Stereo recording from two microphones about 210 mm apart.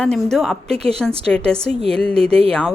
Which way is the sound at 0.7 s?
30° right (ahead or behind).